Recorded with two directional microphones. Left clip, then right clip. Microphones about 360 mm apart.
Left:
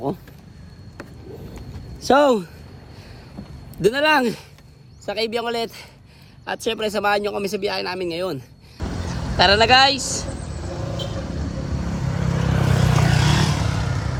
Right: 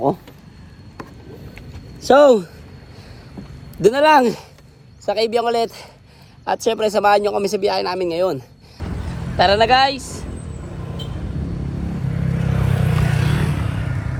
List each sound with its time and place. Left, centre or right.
2.0 s speech: centre
3.8 s speech: centre
12.3 s vehicle: left